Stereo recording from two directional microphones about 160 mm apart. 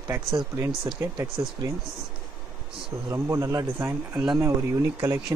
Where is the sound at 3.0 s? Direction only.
20° right (ahead or behind).